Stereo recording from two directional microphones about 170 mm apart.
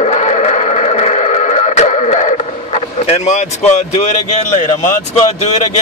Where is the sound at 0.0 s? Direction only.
40° left (ahead or behind).